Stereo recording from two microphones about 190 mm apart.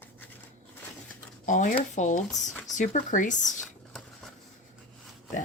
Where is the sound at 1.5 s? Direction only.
40° left (ahead or behind).